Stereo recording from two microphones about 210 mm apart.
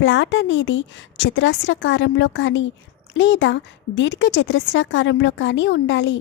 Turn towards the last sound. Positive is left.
turn(degrees=60)  # may be behind; listen again after turning